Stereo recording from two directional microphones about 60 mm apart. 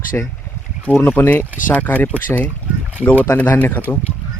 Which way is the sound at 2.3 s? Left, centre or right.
Centre.